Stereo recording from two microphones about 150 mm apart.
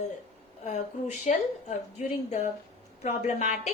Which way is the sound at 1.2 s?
50° left (ahead or behind).